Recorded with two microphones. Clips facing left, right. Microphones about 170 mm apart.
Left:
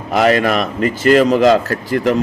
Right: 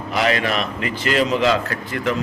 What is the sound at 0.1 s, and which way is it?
A man's voice, 45° left (ahead or behind).